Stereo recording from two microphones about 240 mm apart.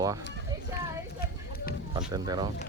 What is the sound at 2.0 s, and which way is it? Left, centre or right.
Speech, centre.